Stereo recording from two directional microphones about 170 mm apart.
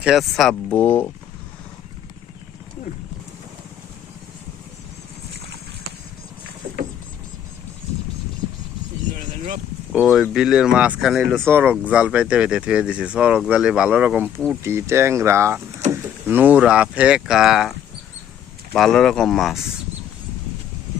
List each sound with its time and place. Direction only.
0.0 s speech: centre (ahead or behind)
9.1 s a sound: 45° right (ahead or behind)
9.9 s speech: centre (ahead or behind)